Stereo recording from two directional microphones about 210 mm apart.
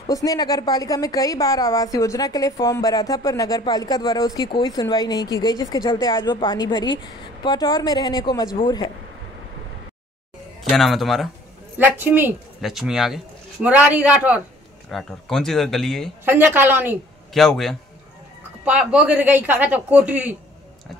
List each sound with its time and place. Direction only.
0.0 s a woman's voice: 15° left (ahead or behind)
10.6 s a man's voice: centre (ahead or behind)
16.3 s a man's voice: 10° right (ahead or behind)
17.3 s a man's voice: centre (ahead or behind)